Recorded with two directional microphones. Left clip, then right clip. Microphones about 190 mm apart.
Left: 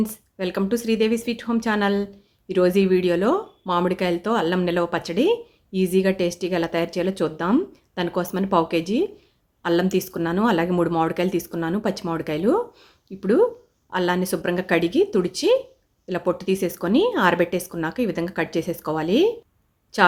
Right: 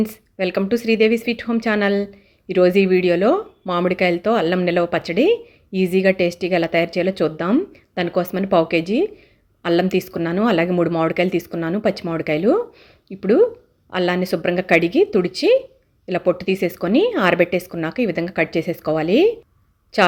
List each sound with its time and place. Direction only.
0.0 s speech: 10° right (ahead or behind)